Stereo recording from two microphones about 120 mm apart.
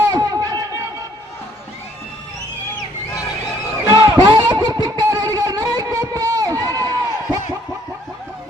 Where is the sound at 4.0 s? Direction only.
35° right (ahead or behind).